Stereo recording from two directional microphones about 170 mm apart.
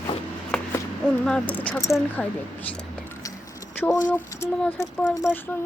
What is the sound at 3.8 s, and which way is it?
Speech, 5° left (ahead or behind).